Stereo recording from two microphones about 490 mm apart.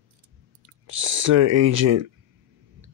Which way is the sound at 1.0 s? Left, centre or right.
Right.